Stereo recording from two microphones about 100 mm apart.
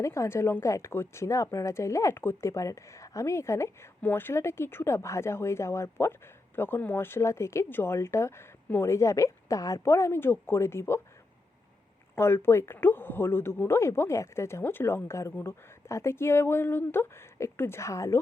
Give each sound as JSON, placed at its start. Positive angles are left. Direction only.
{"t": 0.0, "sound": "speech", "side_deg": 30}
{"t": 12.1, "sound": "speech", "side_deg": 20}